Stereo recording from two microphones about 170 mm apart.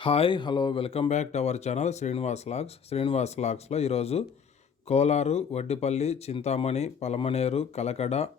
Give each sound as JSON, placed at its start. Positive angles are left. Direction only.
{"t": 0.0, "sound": "speech", "side_deg": 30}